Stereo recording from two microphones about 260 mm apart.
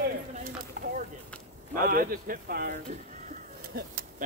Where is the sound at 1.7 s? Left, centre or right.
Right.